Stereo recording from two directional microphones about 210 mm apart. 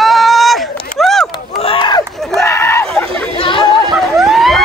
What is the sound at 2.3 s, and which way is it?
Screaming, 10° left (ahead or behind).